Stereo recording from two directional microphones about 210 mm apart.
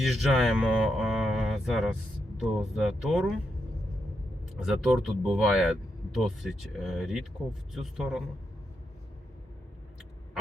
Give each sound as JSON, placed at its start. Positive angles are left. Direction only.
{"t": 0.0, "sound": "speech", "side_deg": 0}
{"t": 4.6, "sound": "speech", "side_deg": 0}